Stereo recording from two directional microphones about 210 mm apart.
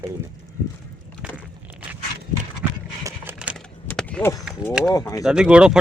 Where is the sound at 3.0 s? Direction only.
10° right (ahead or behind).